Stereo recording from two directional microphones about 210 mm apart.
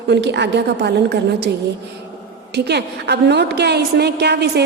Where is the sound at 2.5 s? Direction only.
50° right (ahead or behind).